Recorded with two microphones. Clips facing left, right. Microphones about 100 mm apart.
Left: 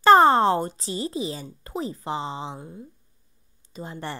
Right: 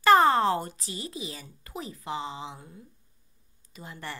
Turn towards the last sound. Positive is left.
turn(degrees=30)  # may be behind; listen again after turning